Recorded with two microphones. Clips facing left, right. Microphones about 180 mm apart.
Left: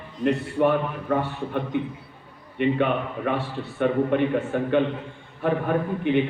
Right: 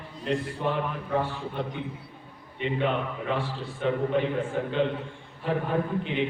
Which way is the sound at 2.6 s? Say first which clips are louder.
Left 5 dB; 65° left (ahead or behind).